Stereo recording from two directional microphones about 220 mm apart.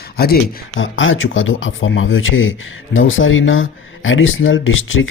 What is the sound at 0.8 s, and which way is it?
Speech, 60° left (ahead or behind).